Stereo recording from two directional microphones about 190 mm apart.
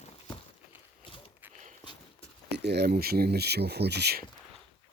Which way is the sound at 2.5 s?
60° right (ahead or behind).